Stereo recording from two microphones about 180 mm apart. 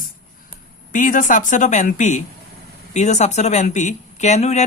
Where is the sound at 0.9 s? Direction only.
45° left (ahead or behind).